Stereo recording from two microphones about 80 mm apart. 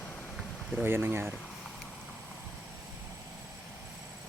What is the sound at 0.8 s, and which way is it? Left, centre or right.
Speech, right.